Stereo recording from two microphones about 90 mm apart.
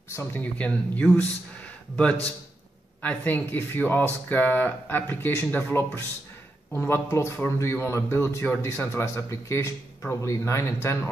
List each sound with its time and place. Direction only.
0.1 s speech: 30° left (ahead or behind)
0.4 s speech: 15° left (ahead or behind)
6.9 s a man's voice: 30° left (ahead or behind)